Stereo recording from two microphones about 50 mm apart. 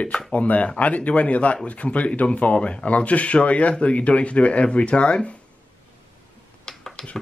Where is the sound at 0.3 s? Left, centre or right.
Left.